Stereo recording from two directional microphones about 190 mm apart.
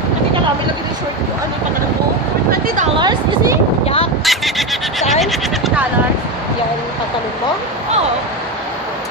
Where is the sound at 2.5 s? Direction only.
50° right (ahead or behind).